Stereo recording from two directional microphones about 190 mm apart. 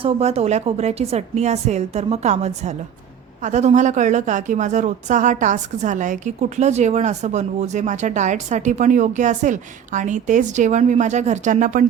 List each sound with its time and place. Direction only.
0.0 s a woman's voice: 30° right (ahead or behind)